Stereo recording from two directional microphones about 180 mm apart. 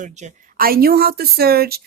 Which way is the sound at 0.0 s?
40° right (ahead or behind).